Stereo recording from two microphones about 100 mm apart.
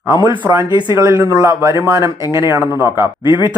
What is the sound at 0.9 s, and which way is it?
Speech, 30° right (ahead or behind).